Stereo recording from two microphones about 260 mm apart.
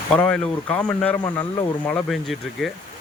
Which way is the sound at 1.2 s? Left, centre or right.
Centre.